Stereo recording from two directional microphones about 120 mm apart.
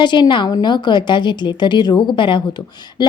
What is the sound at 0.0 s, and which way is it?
A woman's voice, 40° left (ahead or behind).